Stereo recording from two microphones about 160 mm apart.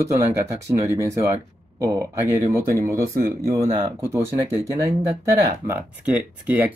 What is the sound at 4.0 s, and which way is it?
Speech, 15° right (ahead or behind).